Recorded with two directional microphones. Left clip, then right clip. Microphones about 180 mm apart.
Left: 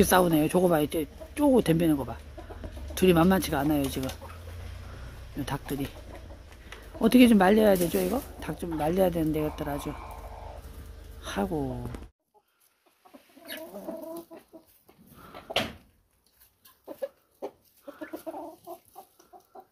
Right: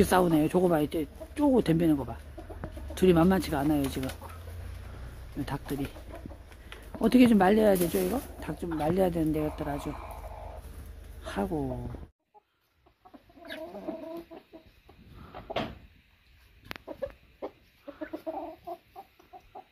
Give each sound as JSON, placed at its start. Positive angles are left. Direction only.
{"t": 0.0, "sound": "speech", "side_deg": 0}
{"t": 5.4, "sound": "speech", "side_deg": 0}
{"t": 11.1, "sound": "speech", "side_deg": 0}
{"t": 14.3, "sound": "chicken", "side_deg": 50}
{"t": 17.0, "sound": "chicken", "side_deg": 10}
{"t": 18.3, "sound": "chicken", "side_deg": 35}